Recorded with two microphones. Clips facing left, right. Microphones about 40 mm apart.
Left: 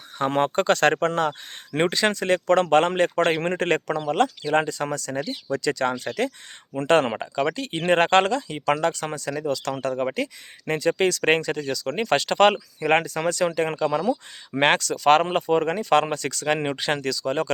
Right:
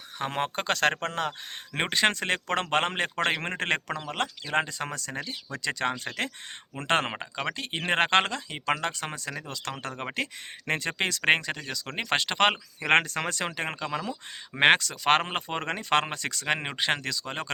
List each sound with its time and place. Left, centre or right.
0.2 s speech: centre
1.9 s speech: right
10.7 s speech: right
10.9 s speech: right
12.8 s speech: right
13.5 s speech: right
14.0 s speech: centre
14.6 s speech: centre